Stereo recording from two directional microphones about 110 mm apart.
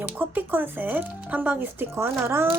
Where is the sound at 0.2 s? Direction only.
20° right (ahead or behind).